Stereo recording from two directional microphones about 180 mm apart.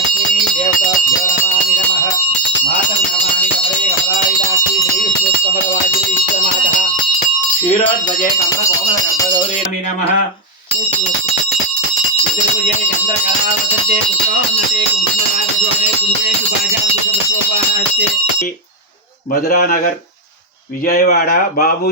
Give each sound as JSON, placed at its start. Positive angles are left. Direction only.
{"t": 19.3, "sound": "speech", "side_deg": 55}